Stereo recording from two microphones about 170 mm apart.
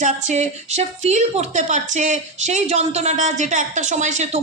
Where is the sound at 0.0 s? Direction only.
45° right (ahead or behind).